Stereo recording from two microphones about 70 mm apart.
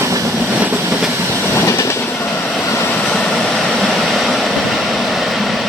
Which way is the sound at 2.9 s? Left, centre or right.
Centre.